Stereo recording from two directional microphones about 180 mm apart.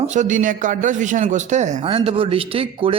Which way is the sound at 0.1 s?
45° right (ahead or behind).